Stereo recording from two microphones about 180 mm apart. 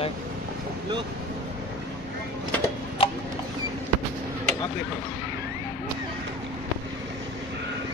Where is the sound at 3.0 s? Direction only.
30° left (ahead or behind).